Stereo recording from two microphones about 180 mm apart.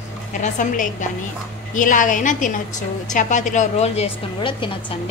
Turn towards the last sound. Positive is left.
turn(degrees=30)  # may be behind; listen again after turning